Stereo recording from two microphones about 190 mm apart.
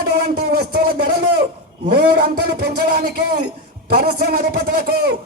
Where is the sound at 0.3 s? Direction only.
55° right (ahead or behind).